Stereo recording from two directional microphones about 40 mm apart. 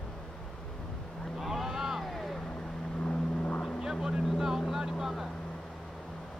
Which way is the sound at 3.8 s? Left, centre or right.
Centre.